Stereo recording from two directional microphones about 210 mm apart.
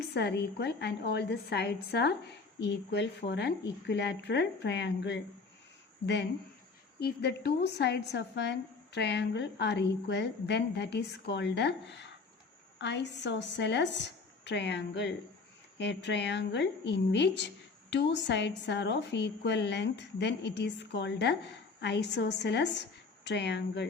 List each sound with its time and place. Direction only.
0.1 s a woman's voice: 50° left (ahead or behind)
7.0 s a woman's voice: 50° left (ahead or behind)